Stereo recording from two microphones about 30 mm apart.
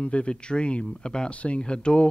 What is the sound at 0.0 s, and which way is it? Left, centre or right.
Speech, left.